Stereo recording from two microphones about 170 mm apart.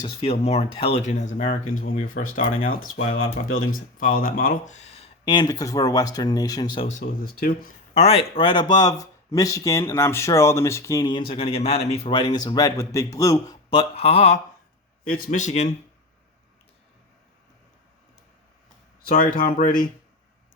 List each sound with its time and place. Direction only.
0.0 s speech: 35° left (ahead or behind); by 2.5 s 55° left (ahead or behind)
3.9 s speech: 55° left (ahead or behind); by 6.8 s 25° left (ahead or behind)
6.8 s speech: 45° left (ahead or behind)
7.3 s speech: 60° left (ahead or behind)
7.9 s speech: 35° left (ahead or behind); by 13.6 s 20° left (ahead or behind)
13.7 s speech: 35° left (ahead or behind)
15.0 s speech: 60° left (ahead or behind)
19.0 s speech: 55° left (ahead or behind)